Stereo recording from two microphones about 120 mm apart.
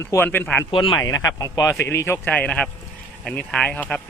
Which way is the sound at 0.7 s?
45° left (ahead or behind).